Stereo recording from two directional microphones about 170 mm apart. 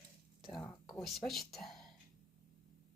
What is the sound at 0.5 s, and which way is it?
Speech, 25° left (ahead or behind).